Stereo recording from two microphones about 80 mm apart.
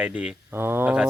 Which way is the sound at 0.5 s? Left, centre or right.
Right.